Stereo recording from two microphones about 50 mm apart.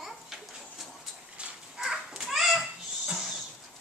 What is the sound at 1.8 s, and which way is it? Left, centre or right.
Children playing, centre.